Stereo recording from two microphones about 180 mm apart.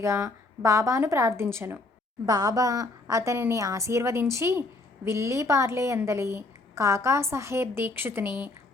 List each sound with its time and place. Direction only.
0.0 s a woman's voice: 15° right (ahead or behind)